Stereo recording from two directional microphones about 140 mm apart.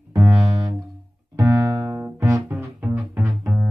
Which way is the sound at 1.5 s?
25° right (ahead or behind).